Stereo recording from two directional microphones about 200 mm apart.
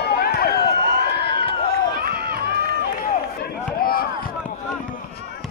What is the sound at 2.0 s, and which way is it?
Run, 50° right (ahead or behind).